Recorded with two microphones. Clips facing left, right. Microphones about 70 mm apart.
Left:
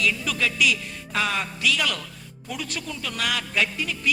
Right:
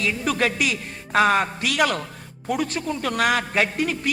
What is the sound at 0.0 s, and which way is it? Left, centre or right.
A man's voice, right.